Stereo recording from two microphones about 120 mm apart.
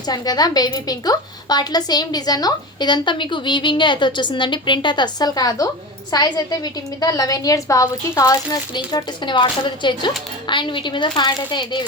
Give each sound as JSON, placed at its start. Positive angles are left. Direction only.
{"t": 0.1, "sound": "a woman's voice", "side_deg": 35}